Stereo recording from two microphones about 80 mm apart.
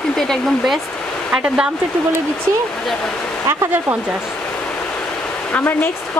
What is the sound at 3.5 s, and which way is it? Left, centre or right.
Speech, right.